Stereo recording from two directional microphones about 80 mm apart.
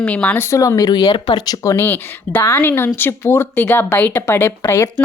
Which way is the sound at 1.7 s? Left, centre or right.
Left.